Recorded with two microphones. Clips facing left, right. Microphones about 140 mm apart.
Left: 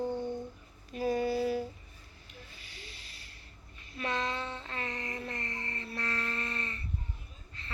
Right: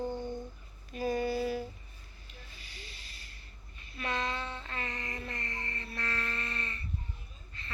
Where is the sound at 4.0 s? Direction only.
30° left (ahead or behind).